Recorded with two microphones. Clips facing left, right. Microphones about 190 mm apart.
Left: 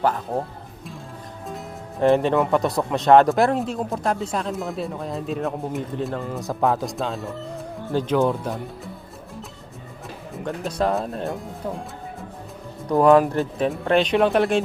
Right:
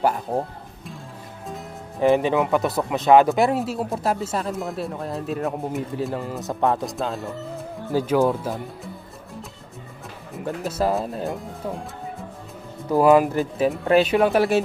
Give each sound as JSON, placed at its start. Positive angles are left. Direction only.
{"t": 0.3, "sound": "speech", "side_deg": -15}
{"t": 2.0, "sound": "speech", "side_deg": 0}
{"t": 10.3, "sound": "speech", "side_deg": -5}
{"t": 12.9, "sound": "speech", "side_deg": -5}